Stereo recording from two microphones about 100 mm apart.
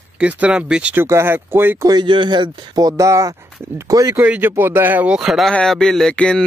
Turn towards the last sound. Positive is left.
turn(degrees=10)  # may be behind; listen again after turning